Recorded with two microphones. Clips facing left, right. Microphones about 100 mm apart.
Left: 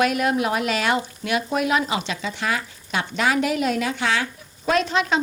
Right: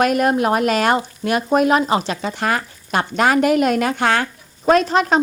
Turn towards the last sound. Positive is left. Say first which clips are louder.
# right 6 dB
turn(degrees=-45)  # may be behind; listen again after turning